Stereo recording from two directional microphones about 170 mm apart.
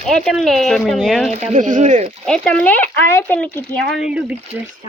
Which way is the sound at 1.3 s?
45° right (ahead or behind).